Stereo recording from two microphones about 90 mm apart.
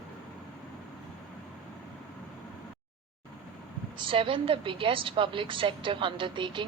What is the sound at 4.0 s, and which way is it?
A woman's voice, 70° right (ahead or behind).